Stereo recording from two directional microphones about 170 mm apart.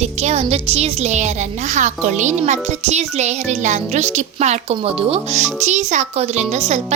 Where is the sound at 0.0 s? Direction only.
40° right (ahead or behind).